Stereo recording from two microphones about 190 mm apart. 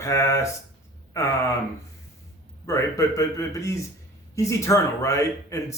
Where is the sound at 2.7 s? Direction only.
15° left (ahead or behind).